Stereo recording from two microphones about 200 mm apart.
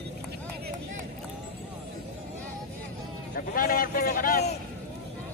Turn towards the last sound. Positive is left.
turn(degrees=45)  # may be behind; listen again after turning